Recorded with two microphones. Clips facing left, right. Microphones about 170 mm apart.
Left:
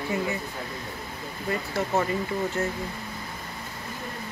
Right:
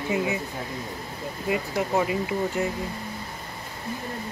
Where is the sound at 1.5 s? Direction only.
10° right (ahead or behind).